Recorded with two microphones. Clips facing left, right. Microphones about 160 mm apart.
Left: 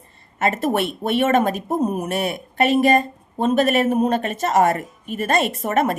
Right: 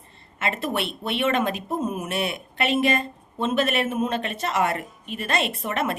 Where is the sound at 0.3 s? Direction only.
45° left (ahead or behind).